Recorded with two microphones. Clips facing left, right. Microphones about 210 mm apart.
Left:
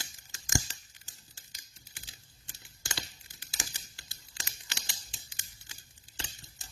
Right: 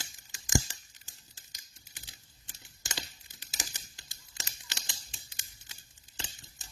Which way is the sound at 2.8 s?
20° right (ahead or behind).